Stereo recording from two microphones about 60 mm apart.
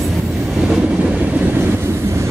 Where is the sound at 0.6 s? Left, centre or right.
Centre.